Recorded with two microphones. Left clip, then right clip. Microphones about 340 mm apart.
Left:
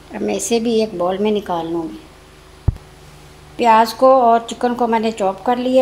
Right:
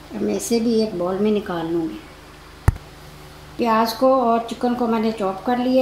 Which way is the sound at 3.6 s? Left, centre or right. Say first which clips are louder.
Left 6 dB; left.